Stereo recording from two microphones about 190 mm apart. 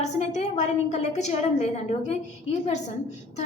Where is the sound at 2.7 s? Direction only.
35° left (ahead or behind).